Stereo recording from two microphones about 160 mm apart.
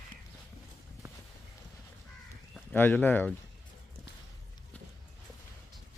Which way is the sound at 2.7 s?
10° left (ahead or behind).